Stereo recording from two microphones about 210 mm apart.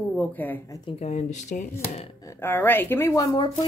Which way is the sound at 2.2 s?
15° left (ahead or behind).